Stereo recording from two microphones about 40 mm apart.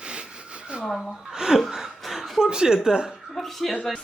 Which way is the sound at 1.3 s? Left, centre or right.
Centre.